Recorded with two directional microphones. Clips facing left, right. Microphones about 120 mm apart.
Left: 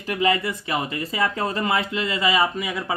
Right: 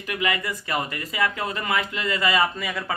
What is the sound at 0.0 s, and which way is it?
Speech, 30° left (ahead or behind).